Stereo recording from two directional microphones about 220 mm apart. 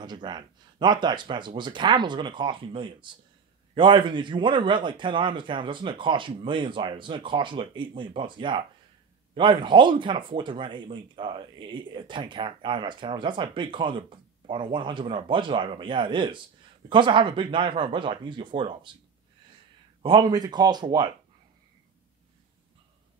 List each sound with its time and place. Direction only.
0.0 s speech: 20° right (ahead or behind)
20.0 s speech: 20° right (ahead or behind)